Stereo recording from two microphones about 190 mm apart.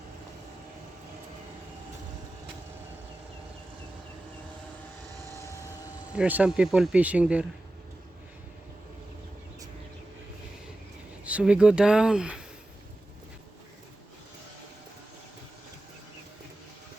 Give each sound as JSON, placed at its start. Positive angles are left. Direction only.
{"t": 5.4, "sound": "vehicle", "side_deg": 15}
{"t": 6.1, "sound": "speech", "side_deg": -5}
{"t": 11.2, "sound": "speech", "side_deg": -5}